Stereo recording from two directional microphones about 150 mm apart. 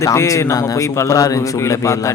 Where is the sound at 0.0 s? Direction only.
20° left (ahead or behind).